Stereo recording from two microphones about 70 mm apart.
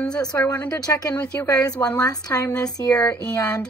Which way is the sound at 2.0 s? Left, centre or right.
Left.